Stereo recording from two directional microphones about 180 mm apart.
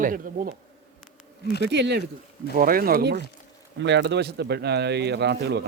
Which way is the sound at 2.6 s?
55° right (ahead or behind).